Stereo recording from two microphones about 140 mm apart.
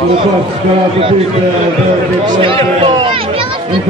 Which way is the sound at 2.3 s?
40° right (ahead or behind).